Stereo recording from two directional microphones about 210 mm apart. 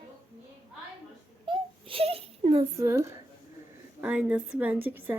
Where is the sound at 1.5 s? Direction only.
25° right (ahead or behind).